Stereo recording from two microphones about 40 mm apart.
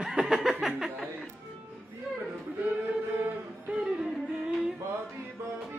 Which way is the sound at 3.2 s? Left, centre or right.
Right.